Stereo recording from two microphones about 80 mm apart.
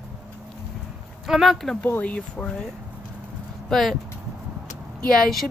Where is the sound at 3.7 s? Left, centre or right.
Centre.